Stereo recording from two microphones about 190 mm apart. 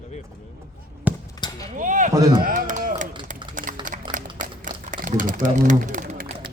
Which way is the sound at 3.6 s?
45° right (ahead or behind).